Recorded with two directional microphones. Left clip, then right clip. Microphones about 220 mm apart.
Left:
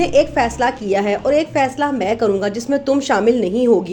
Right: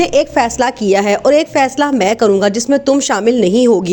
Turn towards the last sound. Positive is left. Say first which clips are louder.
# right 4 dB
turn(degrees=-40)  # may be behind; listen again after turning